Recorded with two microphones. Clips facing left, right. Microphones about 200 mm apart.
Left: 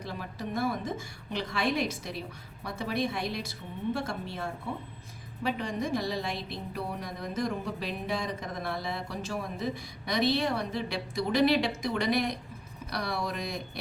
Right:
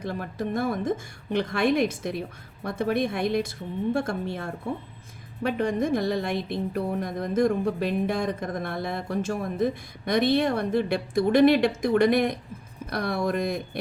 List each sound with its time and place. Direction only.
0.0 s a woman's voice: 55° right (ahead or behind)